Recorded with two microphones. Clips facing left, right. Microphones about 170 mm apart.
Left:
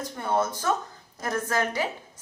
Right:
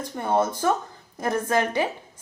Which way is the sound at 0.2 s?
25° right (ahead or behind).